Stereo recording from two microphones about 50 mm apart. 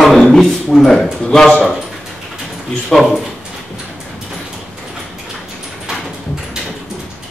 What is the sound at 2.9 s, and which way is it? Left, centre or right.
Speech, centre.